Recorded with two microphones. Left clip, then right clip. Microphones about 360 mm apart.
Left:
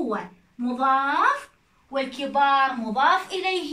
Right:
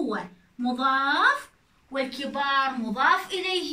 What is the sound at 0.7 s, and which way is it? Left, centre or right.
Speech, centre.